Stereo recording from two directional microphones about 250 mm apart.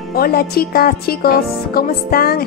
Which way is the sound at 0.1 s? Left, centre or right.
Left.